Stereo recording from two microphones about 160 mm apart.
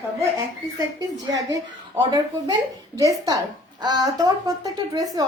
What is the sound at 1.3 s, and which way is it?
A woman's voice, 20° right (ahead or behind).